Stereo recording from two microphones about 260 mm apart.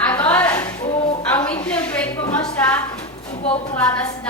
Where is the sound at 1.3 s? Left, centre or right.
Centre.